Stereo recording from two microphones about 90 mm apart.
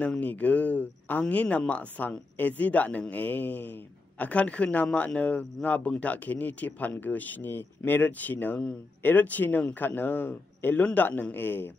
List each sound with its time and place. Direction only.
0.0 s a man's voice: 15° left (ahead or behind)